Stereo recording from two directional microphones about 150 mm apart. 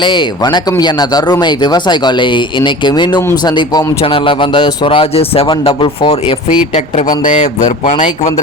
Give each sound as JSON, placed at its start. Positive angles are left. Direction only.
{"t": 0.0, "sound": "a man's voice", "side_deg": 30}
{"t": 7.3, "sound": "speech", "side_deg": 55}